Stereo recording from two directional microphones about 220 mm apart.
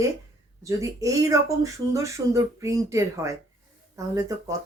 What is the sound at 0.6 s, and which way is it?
Speech, 15° right (ahead or behind).